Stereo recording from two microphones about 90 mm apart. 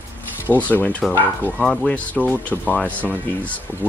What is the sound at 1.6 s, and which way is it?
Speech, 5° left (ahead or behind).